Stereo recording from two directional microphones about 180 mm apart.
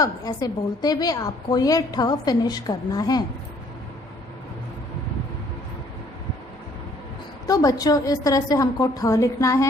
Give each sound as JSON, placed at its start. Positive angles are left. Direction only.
{"t": 0.0, "sound": "a woman's voice", "side_deg": 20}
{"t": 7.4, "sound": "a woman's voice", "side_deg": 20}